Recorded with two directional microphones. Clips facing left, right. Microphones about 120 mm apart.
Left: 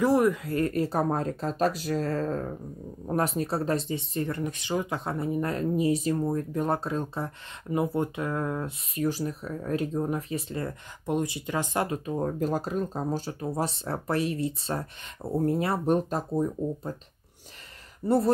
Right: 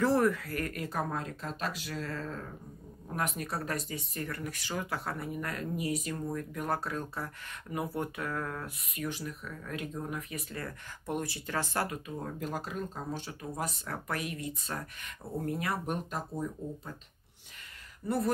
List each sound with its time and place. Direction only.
0.0 s speech: 15° left (ahead or behind)
12.1 s speech: 40° left (ahead or behind)
18.0 s speech: 30° left (ahead or behind)